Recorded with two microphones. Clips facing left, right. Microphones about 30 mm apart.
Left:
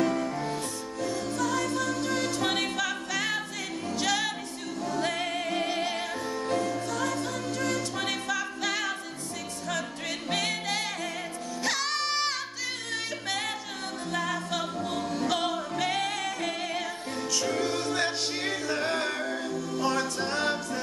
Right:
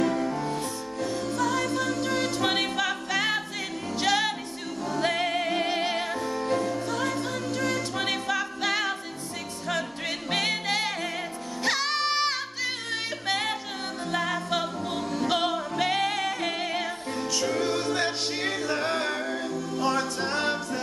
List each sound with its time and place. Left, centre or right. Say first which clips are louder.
0.0 s music: right 1 dB; centre; by 6.0 s right
6.4 s music: right 1 dB; centre
6.9 s a capella: right 2 dB; centre
9.7 s music: right 3 dB; centre
15.2 s music: right 4 dB; centre
17.4 s music: right 2 dB; centre